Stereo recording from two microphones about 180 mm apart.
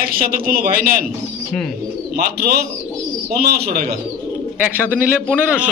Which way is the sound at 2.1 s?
60° right (ahead or behind).